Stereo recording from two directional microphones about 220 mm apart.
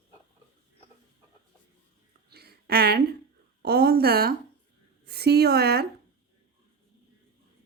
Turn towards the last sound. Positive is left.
turn(degrees=-45)  # may be behind; listen again after turning